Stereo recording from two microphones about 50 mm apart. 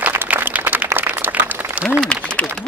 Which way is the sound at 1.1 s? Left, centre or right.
Right.